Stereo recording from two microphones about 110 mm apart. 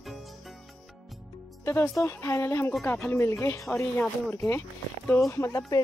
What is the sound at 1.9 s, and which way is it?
Speech, 25° left (ahead or behind).